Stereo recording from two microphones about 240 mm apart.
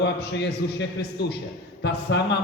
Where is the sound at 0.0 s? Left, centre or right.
Left.